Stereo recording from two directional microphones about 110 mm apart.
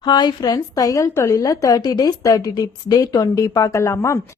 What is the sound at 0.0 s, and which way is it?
A woman's voice, 40° left (ahead or behind).